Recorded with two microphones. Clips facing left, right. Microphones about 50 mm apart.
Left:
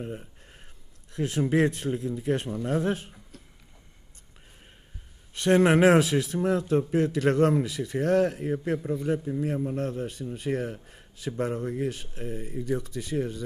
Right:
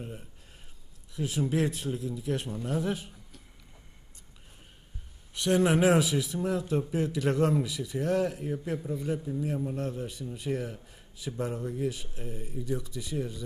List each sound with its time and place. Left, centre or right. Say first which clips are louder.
0.0 s speech: left 6 dB; centre
1.1 s speech: left 5 dB; left
5.3 s a man's voice: left 4 dB; left
8.8 s a man's voice: left 4 dB; left